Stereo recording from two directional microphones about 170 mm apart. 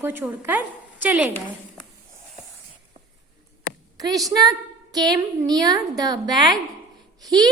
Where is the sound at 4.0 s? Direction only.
20° right (ahead or behind).